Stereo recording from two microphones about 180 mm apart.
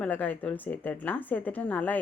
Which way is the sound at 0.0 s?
10° left (ahead or behind).